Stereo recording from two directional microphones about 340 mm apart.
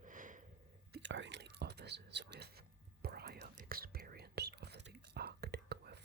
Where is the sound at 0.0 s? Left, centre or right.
Right.